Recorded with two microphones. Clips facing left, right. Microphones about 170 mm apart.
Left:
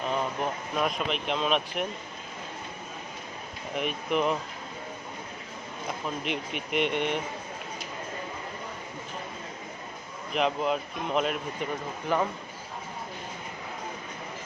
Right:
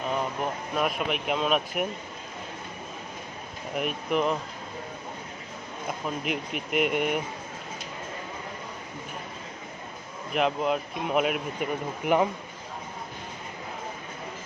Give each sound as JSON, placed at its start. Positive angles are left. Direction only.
{"t": 0.1, "sound": "speech", "side_deg": -5}
{"t": 3.8, "sound": "speech", "side_deg": 0}
{"t": 6.2, "sound": "speech", "side_deg": 0}
{"t": 10.3, "sound": "speech", "side_deg": 0}
{"t": 12.0, "sound": "a man's voice", "side_deg": -20}